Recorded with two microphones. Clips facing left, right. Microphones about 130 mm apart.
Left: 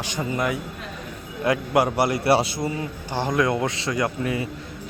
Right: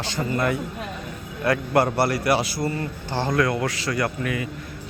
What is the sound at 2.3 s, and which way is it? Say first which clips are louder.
Speech: left 2 dB; 30° left (ahead or behind).